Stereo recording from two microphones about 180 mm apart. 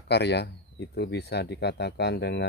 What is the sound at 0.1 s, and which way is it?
Speech, 70° left (ahead or behind).